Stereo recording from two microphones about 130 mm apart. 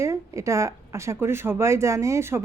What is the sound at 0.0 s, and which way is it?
Speech, 20° right (ahead or behind).